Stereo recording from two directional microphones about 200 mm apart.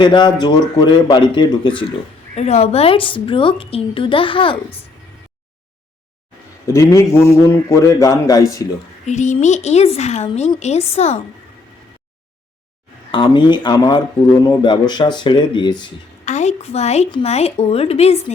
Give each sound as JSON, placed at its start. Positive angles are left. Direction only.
{"t": 0.0, "sound": "a woman's voice", "side_deg": 25}
{"t": 6.7, "sound": "a man's voice", "side_deg": 15}
{"t": 9.0, "sound": "speech", "side_deg": 35}
{"t": 13.1, "sound": "a woman's voice", "side_deg": 25}
{"t": 16.2, "sound": "speech", "side_deg": 35}